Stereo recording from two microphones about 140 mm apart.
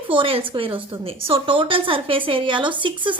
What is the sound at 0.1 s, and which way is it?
A woman's voice, 40° right (ahead or behind).